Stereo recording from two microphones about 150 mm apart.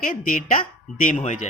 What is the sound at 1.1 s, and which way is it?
Speech, 55° left (ahead or behind).